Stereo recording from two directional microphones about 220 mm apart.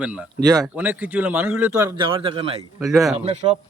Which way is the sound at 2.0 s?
25° right (ahead or behind).